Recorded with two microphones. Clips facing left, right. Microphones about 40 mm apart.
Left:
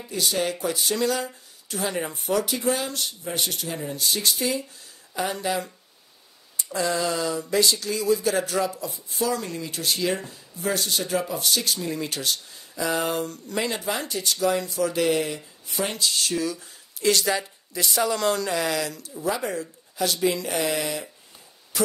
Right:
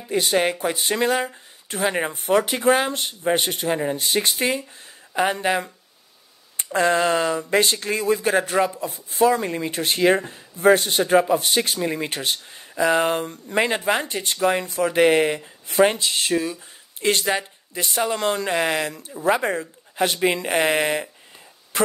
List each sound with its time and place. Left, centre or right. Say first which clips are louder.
0.1 s speech: right 6 dB; right
6.5 s a sound: right 6 dB; right
7.4 s speech: right 3 dB; right